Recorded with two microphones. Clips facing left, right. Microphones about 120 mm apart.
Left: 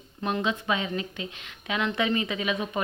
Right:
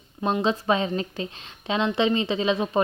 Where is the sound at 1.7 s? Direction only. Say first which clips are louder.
Right 4 dB; 25° right (ahead or behind).